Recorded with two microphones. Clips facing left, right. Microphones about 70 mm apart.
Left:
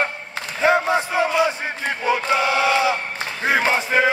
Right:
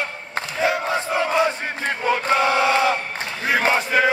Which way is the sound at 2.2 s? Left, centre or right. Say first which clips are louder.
Right 3 dB; right.